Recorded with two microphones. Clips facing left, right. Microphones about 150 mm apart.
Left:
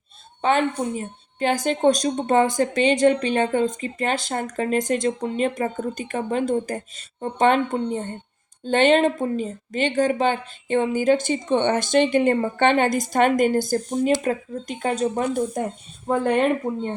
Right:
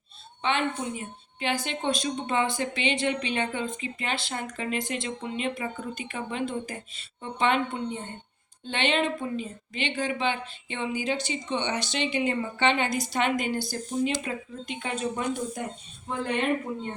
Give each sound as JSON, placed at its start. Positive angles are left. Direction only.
{"t": 0.4, "sound": "a woman's voice", "side_deg": 40}
{"t": 16.0, "sound": "a woman's voice", "side_deg": 50}